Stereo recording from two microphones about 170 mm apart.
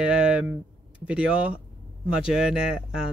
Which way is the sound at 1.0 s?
5° right (ahead or behind).